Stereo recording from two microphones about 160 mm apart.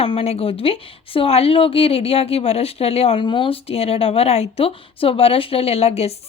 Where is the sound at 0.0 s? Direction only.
40° left (ahead or behind).